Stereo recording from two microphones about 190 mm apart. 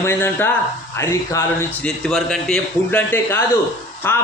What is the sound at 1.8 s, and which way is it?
A man's voice, centre (ahead or behind).